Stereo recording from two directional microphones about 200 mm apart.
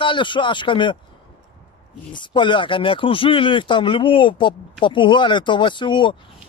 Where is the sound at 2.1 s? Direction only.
25° left (ahead or behind).